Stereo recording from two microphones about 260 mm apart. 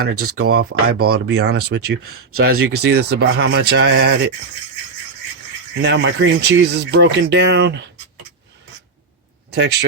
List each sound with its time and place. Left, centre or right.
0.0 s speech: right
0.3 s speech: right
0.5 s speech: right
5.7 s speech: right